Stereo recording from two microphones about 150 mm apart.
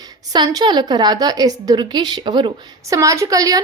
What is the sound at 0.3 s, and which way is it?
A woman's voice, 25° right (ahead or behind).